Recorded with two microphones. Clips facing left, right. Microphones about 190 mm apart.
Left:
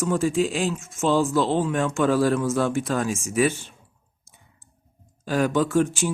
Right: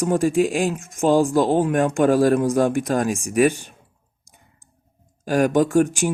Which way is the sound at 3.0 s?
15° right (ahead or behind).